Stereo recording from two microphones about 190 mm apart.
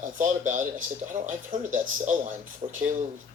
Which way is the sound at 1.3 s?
45° right (ahead or behind).